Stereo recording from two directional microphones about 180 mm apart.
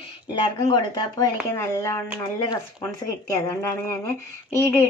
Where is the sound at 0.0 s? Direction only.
25° left (ahead or behind).